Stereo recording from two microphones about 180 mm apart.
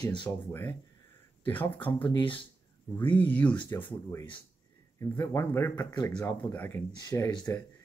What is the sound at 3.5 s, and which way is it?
Speech, 25° left (ahead or behind).